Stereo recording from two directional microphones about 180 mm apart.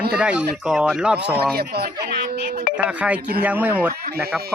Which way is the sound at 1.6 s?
60° right (ahead or behind).